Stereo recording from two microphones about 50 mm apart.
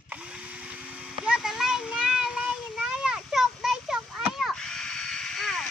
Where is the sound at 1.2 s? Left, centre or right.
Centre.